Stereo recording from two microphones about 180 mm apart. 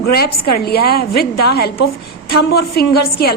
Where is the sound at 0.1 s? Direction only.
60° left (ahead or behind).